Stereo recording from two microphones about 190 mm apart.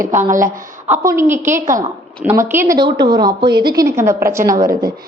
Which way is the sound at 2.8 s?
25° right (ahead or behind).